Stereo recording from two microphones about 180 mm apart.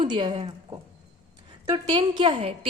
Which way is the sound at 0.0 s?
25° right (ahead or behind).